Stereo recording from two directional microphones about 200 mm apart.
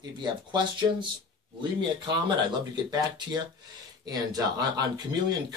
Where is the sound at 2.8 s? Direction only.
20° right (ahead or behind).